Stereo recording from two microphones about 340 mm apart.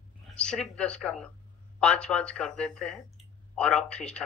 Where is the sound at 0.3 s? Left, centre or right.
Centre.